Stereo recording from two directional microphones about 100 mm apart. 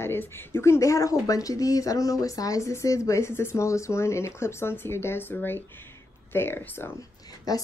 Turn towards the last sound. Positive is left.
turn(degrees=40)  # may be behind; listen again after turning